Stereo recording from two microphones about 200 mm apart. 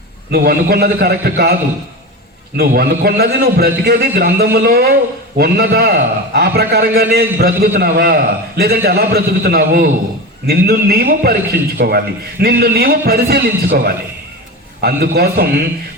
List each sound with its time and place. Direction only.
0.3 s a man's voice: 50° right (ahead or behind)
2.6 s a man's voice: 50° right (ahead or behind)